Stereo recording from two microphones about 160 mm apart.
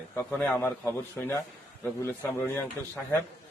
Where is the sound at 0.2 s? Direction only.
10° left (ahead or behind).